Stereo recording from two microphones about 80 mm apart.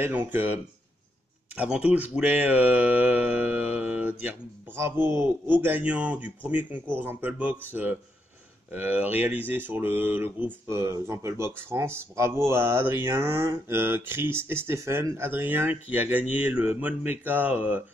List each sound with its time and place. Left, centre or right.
0.0 s speech: right
4.7 s speech: right
15.4 s speech: right